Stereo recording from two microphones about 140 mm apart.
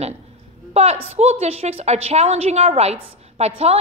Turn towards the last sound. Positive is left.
turn(degrees=-50)  # may be behind; listen again after turning